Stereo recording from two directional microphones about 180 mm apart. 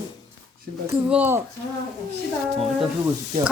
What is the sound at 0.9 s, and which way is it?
Speech, 10° right (ahead or behind).